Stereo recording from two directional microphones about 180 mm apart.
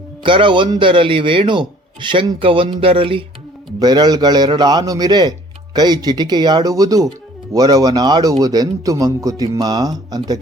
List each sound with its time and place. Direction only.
0.2 s speech: 30° right (ahead or behind)